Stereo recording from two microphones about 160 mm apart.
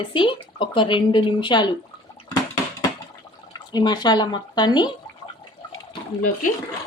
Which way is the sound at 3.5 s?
25° left (ahead or behind).